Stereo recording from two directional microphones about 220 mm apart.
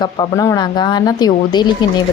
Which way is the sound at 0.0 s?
20° left (ahead or behind).